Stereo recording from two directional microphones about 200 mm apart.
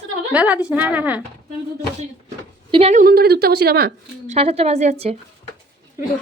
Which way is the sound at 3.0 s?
50° right (ahead or behind).